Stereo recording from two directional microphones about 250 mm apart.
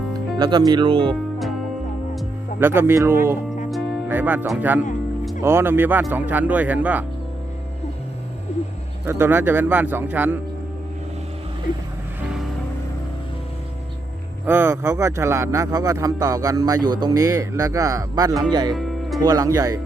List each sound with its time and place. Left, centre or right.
0.3 s speech: centre
2.1 s speech: centre
9.0 s speech: centre
14.4 s speech: centre
18.7 s music: centre
19.2 s speech: centre